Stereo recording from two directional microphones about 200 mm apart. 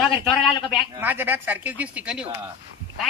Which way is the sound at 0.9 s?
10° right (ahead or behind).